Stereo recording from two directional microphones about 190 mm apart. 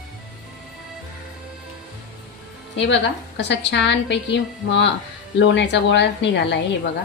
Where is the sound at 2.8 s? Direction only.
70° left (ahead or behind).